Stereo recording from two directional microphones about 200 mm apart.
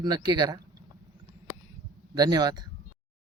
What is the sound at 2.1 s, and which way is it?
Speech, 20° right (ahead or behind).